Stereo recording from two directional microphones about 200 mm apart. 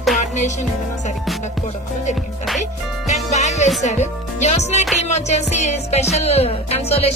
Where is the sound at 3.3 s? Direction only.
35° left (ahead or behind).